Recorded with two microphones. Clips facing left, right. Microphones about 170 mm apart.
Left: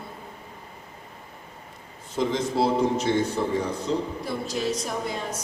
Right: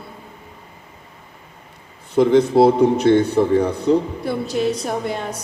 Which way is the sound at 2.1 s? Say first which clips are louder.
Right 11 dB; 60° right (ahead or behind).